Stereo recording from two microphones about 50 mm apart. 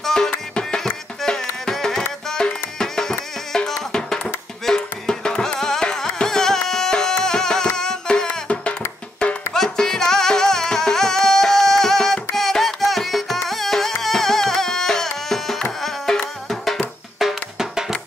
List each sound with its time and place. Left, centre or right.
0.0 s music: centre
9.6 s music: centre